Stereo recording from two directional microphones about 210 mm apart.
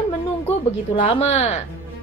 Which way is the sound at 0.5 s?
25° left (ahead or behind).